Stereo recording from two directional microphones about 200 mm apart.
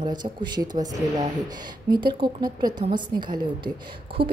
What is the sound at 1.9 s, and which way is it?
A woman's voice, 25° right (ahead or behind).